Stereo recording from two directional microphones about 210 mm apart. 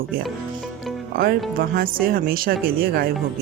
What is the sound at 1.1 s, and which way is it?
Speech, 45° right (ahead or behind).